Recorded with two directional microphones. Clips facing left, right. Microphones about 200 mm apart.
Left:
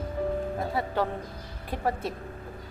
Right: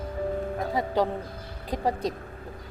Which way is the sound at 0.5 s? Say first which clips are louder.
Right 3 dB; 15° right (ahead or behind).